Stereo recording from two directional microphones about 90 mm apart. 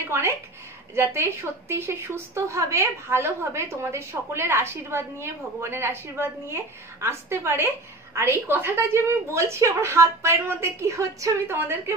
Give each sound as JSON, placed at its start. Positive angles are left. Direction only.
{"t": 0.1, "sound": "a woman's voice", "side_deg": -30}
{"t": 11.5, "sound": "a woman's voice", "side_deg": -25}